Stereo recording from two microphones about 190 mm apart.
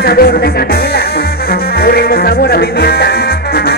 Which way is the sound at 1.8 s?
55° left (ahead or behind).